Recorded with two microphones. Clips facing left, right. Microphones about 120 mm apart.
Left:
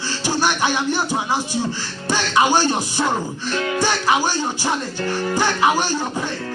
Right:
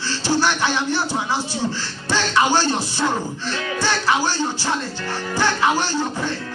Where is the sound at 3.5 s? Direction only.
40° left (ahead or behind).